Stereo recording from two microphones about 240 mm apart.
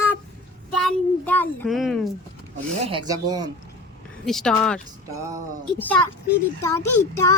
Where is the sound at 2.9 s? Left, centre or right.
Centre.